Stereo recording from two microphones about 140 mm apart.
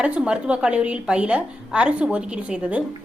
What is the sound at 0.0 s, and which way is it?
A woman's voice, 10° right (ahead or behind).